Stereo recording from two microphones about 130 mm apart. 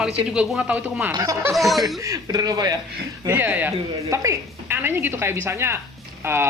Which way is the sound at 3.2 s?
15° right (ahead or behind).